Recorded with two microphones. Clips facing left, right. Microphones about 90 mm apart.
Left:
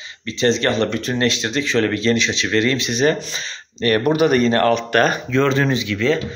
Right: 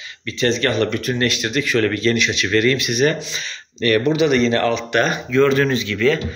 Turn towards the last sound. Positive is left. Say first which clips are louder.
# right 1 dB
turn(degrees=20)  # may be behind; listen again after turning